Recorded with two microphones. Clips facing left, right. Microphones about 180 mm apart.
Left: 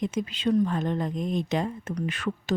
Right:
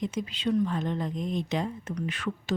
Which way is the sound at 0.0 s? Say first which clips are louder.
Left 3 dB; 50° left (ahead or behind).